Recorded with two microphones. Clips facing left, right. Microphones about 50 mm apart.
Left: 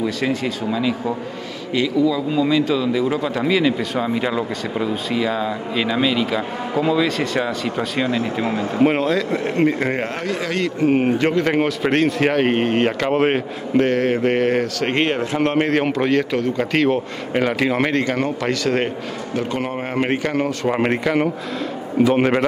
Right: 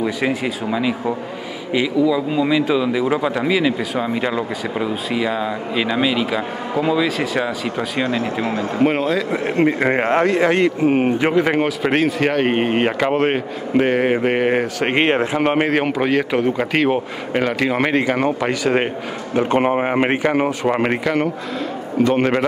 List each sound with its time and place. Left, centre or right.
0.0 s speech: centre
9.4 s speech: centre
10.8 s speech: centre
11.5 s speech: centre
19.3 s speech: right; by 22.4 s centre